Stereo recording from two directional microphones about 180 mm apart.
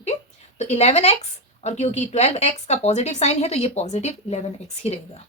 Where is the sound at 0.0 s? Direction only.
40° left (ahead or behind).